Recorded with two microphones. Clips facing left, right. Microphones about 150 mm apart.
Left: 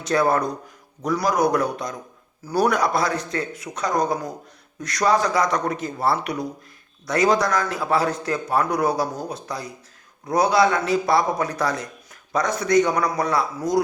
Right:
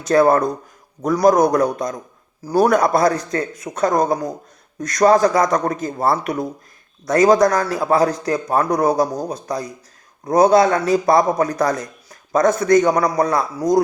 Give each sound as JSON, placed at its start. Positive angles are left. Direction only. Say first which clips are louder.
{"t": 0.0, "sound": "a man's voice", "louder": "right 6 dB", "side_deg": -50}